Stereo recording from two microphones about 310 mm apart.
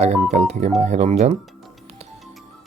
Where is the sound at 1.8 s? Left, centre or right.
Centre.